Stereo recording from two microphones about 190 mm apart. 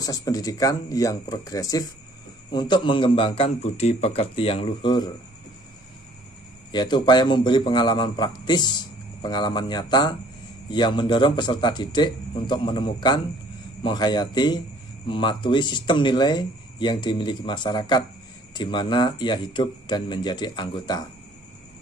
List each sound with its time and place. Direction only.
0.0 s a man's voice: 20° left (ahead or behind)
6.7 s a man's voice: 25° left (ahead or behind)